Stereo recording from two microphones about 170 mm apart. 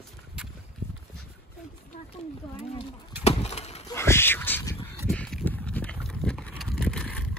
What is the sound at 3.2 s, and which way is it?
Pigeon, 40° left (ahead or behind).